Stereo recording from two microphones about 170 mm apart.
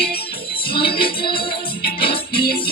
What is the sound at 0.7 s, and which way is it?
Music, 65° left (ahead or behind).